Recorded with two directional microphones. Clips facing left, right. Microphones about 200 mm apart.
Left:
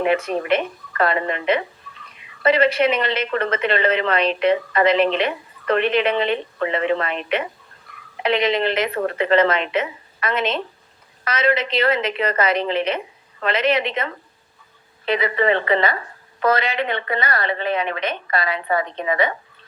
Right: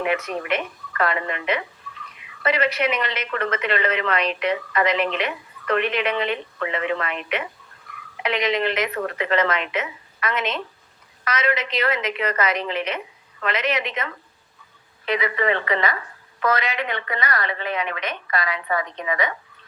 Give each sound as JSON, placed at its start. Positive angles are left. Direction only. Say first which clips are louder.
{"t": 0.0, "sound": "a woman's voice", "louder": "left 5 dB", "side_deg": 30}